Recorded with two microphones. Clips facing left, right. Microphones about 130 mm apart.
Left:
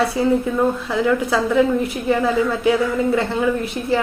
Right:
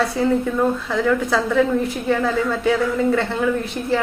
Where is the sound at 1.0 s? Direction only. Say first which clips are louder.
Left 1 dB; 5° left (ahead or behind).